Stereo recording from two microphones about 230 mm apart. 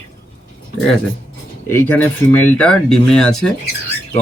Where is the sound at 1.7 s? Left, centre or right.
Centre.